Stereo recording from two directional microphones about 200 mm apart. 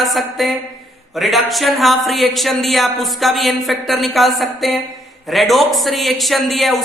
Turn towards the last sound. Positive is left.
turn(degrees=0)  # may be behind; listen again after turning